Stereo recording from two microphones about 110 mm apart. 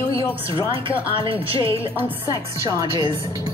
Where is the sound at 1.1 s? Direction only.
50° right (ahead or behind).